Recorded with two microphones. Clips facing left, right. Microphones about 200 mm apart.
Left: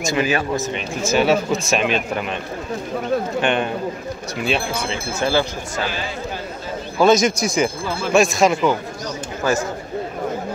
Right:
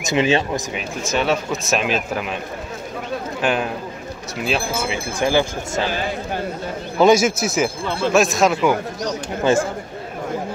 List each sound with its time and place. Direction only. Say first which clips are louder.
0.0 s speech: right 2 dB; 20° right (ahead or behind)
0.7 s speech: left 5 dB; 5° left (ahead or behind)
3.3 s speech: left 1 dB; 5° right (ahead or behind)
7.0 s speech: right 1 dB; 10° right (ahead or behind)